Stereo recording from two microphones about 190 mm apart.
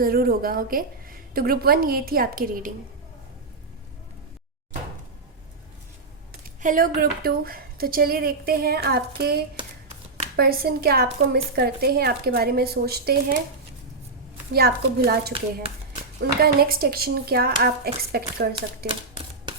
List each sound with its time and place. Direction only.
0.0 s a woman's voice: 50° right (ahead or behind)
6.6 s a woman's voice: 45° right (ahead or behind)
14.5 s a woman's voice: 55° right (ahead or behind)
15.3 s speech: 30° right (ahead or behind)
16.4 s a woman's voice: 50° right (ahead or behind)